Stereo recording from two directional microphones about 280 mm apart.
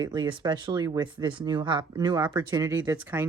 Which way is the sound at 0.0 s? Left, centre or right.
Centre.